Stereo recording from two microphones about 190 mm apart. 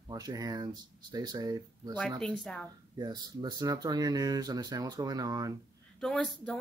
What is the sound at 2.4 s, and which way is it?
Speech, centre (ahead or behind).